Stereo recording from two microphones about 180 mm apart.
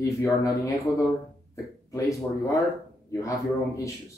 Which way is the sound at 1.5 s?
15° left (ahead or behind).